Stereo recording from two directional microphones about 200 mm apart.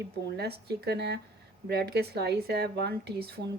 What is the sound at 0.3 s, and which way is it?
Speech, 55° right (ahead or behind).